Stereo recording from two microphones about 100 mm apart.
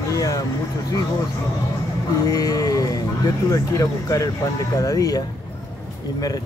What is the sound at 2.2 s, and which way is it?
Music, 35° left (ahead or behind).